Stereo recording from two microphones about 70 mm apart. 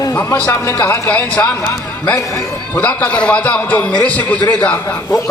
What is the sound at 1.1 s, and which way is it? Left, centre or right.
A man's voice, left.